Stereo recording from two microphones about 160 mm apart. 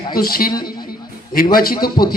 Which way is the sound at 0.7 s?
65° left (ahead or behind).